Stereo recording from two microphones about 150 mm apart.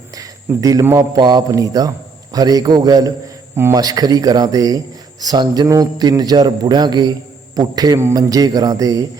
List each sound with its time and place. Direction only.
0.2 s a man's voice: 25° right (ahead or behind)